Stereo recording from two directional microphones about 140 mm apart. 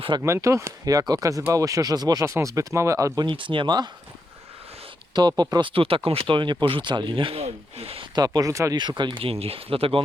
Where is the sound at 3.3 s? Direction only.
35° right (ahead or behind).